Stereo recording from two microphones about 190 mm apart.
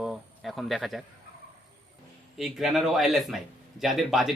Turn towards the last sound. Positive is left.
turn(degrees=0)  # may be behind; listen again after turning